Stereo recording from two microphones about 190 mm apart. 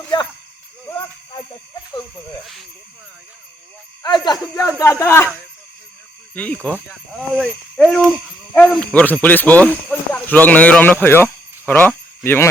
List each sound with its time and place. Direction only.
2.4 s speech: centre (ahead or behind)
4.0 s speech: 20° left (ahead or behind)
6.3 s speech: 5° left (ahead or behind)